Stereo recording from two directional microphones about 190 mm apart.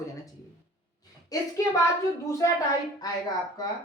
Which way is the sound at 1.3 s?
20° left (ahead or behind).